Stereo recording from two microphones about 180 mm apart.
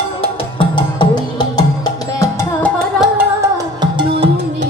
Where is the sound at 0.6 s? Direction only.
25° left (ahead or behind).